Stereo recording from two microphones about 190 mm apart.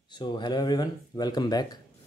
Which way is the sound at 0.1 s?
25° left (ahead or behind).